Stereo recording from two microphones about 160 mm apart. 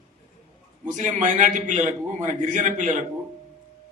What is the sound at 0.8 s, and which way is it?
A man's voice, 50° right (ahead or behind).